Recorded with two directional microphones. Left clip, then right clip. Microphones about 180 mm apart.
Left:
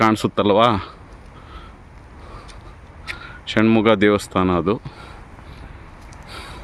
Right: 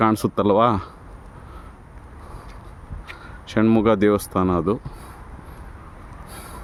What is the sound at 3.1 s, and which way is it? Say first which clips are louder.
Speech: left 3 dB; 5° right (ahead or behind).